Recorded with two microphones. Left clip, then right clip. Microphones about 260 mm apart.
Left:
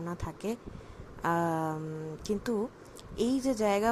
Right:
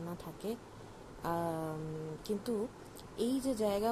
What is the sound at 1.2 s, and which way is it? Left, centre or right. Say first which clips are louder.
A woman's voice: left 7 dB; left.